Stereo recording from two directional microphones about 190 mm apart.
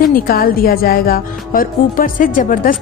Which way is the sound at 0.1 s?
50° left (ahead or behind).